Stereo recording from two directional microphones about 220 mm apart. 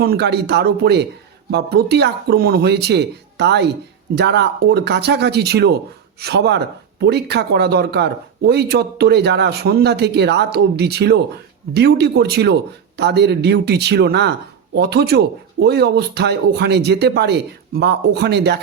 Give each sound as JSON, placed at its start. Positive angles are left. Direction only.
{"t": 0.0, "sound": "speech", "side_deg": -45}